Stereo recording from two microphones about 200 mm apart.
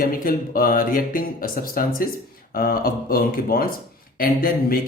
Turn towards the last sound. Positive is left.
turn(degrees=45)  # may be behind; listen again after turning